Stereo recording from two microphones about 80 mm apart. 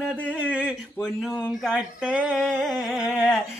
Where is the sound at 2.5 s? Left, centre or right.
Centre.